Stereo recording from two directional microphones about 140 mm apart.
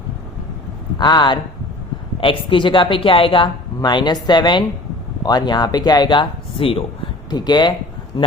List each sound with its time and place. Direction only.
0.9 s a man's voice: 30° left (ahead or behind)